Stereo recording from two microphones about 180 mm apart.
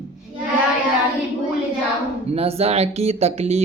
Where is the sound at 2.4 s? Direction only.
35° right (ahead or behind).